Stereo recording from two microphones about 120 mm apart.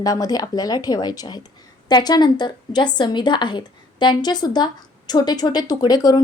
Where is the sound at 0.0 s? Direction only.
30° left (ahead or behind).